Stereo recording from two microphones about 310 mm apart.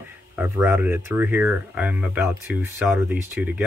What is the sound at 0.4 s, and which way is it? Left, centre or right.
Speech, centre.